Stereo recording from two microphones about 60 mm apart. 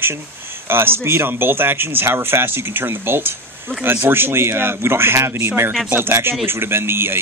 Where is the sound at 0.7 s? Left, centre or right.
Right.